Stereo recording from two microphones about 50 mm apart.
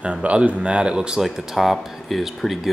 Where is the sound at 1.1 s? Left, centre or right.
Centre.